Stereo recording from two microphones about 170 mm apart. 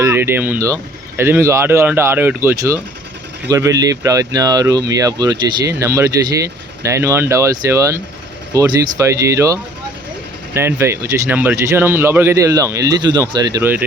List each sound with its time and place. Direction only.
0.0 s speech: 15° right (ahead or behind)